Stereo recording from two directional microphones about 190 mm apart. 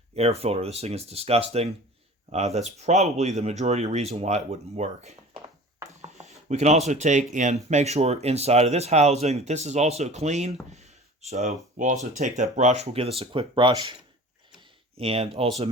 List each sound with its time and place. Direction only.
0.2 s speech: 35° right (ahead or behind)
5.9 s a sound: 35° right (ahead or behind)
6.5 s speech: 35° right (ahead or behind)
14.9 s speech: 30° right (ahead or behind)